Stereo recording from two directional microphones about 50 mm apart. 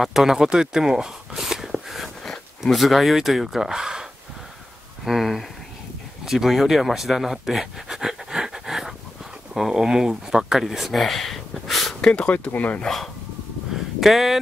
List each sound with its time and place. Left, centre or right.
0.0 s speech: centre
5.0 s a sound: centre
6.2 s speech: centre
12.0 s speech: centre
12.8 s speech: centre